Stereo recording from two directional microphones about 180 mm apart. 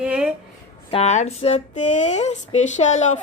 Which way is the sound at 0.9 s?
35° left (ahead or behind).